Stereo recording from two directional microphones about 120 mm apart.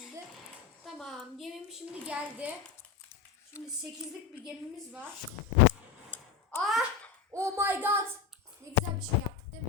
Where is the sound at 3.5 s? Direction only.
20° left (ahead or behind).